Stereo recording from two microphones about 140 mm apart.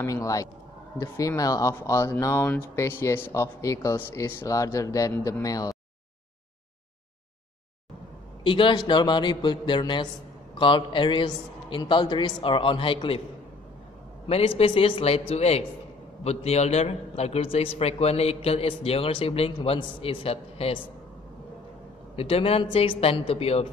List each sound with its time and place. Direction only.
0.0 s speech: 25° left (ahead or behind)
8.5 s a man's voice: 35° left (ahead or behind)
14.2 s a man's voice: 40° left (ahead or behind)
22.1 s a man's voice: 40° left (ahead or behind)